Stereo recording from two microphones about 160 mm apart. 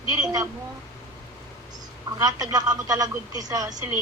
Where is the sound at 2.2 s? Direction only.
20° right (ahead or behind).